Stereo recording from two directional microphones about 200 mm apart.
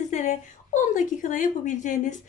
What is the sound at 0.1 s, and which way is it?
A woman's voice, 40° left (ahead or behind).